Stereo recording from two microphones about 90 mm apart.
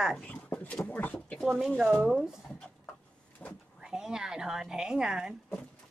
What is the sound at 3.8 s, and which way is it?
A woman's voice, 5° right (ahead or behind).